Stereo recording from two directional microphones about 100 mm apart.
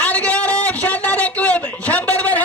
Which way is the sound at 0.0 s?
15° left (ahead or behind).